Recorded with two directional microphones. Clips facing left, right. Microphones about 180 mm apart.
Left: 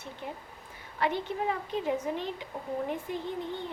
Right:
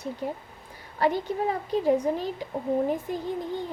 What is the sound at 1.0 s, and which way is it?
A child's voice, 40° right (ahead or behind).